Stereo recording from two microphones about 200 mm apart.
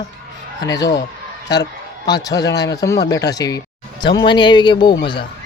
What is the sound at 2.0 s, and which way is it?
Speech, 20° left (ahead or behind).